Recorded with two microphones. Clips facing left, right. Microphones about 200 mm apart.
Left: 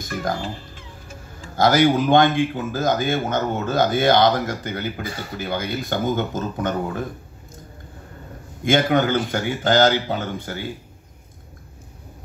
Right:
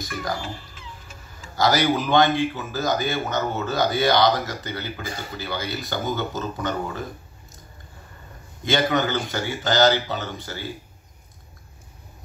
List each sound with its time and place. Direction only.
0.0 s speech: 50° left (ahead or behind)
1.6 s speech: 50° left (ahead or behind)
8.6 s speech: 50° left (ahead or behind)